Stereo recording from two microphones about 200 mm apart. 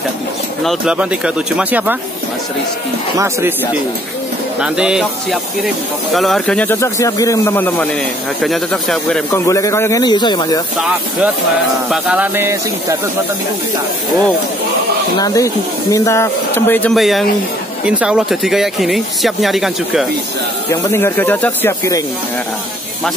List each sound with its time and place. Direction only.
0.7 s speech: 5° right (ahead or behind)
3.2 s speech: 15° right (ahead or behind)
4.6 s speech: 5° right (ahead or behind)
9.3 s speech: 15° left (ahead or behind)
11.9 s speech: 5° right (ahead or behind)
15.1 s speech: 15° left (ahead or behind); by 20.1 s centre (ahead or behind)
20.7 s speech: 10° left (ahead or behind)